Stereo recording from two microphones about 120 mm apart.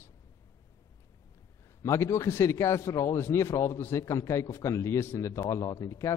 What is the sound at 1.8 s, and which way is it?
A man's voice, 25° left (ahead or behind).